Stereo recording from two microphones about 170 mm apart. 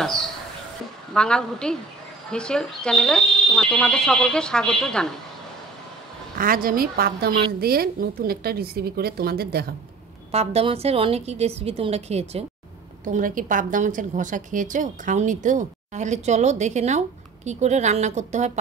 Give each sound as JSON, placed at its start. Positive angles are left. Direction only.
{"t": 1.1, "sound": "speech", "side_deg": 5}
{"t": 6.3, "sound": "a woman's voice", "side_deg": -55}
{"t": 10.3, "sound": "a woman's voice", "side_deg": -35}
{"t": 13.0, "sound": "a woman's voice", "side_deg": -50}